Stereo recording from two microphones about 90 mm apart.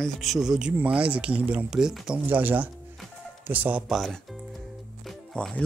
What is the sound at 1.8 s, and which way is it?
Speech, 5° right (ahead or behind).